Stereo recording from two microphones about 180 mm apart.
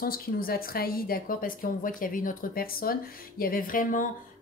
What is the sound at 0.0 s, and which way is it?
A woman's voice, 55° left (ahead or behind).